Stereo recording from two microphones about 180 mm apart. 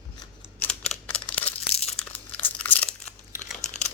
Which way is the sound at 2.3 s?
10° left (ahead or behind).